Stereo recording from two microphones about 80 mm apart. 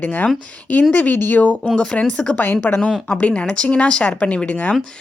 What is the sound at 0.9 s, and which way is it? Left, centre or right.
Speech, left.